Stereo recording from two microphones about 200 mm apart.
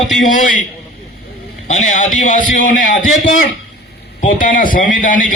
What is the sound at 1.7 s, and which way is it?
A man's voice, 35° left (ahead or behind).